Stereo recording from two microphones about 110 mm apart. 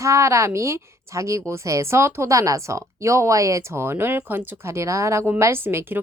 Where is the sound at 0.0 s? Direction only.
25° right (ahead or behind).